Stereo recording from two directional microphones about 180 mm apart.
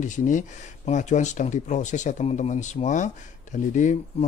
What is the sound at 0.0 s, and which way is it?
Speech, 45° left (ahead or behind).